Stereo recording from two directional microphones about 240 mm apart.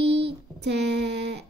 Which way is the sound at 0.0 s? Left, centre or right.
Right.